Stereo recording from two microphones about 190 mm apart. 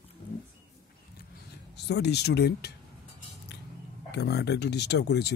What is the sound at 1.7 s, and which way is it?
Speech, 60° left (ahead or behind).